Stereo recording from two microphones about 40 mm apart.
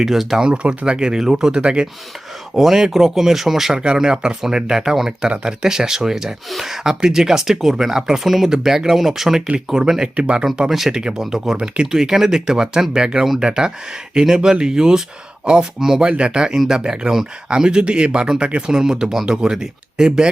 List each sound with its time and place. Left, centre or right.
0.0 s speech: centre
0.3 s speech: right
2.6 s speech: centre
3.7 s speech: right
10.2 s speech: right
10.7 s speech: centre
11.5 s speech: right
16.0 s speech: right
18.7 s speech: centre